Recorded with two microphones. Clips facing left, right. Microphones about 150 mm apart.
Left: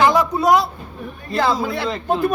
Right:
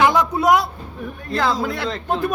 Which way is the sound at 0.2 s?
Centre (ahead or behind).